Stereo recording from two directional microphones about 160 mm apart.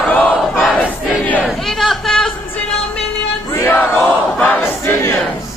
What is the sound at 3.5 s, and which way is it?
Battle cry, 15° left (ahead or behind).